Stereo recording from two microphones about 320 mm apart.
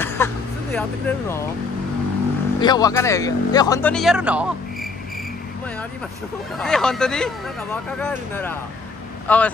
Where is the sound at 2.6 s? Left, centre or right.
Centre.